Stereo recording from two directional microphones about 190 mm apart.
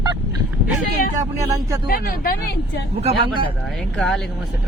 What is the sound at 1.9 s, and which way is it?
Speech, 50° left (ahead or behind).